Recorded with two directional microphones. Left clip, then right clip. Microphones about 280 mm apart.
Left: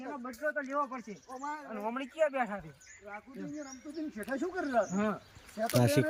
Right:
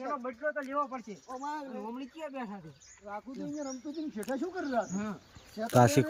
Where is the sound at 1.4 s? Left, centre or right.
Right.